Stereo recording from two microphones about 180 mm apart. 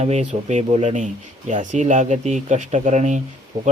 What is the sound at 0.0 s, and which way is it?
Speech, 40° right (ahead or behind).